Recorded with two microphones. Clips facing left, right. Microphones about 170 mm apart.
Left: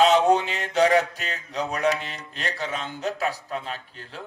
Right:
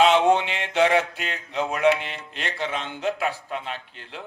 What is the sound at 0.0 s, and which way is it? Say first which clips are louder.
A man's voice: even; 40° left (ahead or behind).